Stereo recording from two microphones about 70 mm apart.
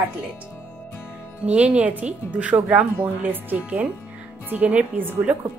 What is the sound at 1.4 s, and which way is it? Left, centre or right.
Speech, centre.